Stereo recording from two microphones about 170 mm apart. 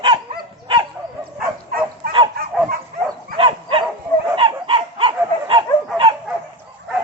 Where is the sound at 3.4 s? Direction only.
30° right (ahead or behind).